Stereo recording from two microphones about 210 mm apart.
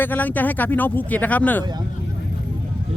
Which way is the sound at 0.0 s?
10° left (ahead or behind).